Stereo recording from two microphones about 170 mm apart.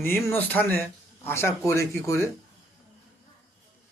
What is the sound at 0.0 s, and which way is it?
A man's voice, 15° left (ahead or behind).